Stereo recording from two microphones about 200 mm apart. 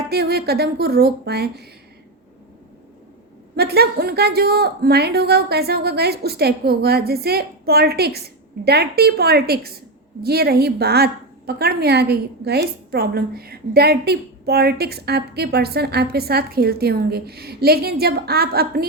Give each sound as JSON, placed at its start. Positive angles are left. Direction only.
{"t": 0.1, "sound": "a woman's voice", "side_deg": -55}
{"t": 3.5, "sound": "a woman's voice", "side_deg": -55}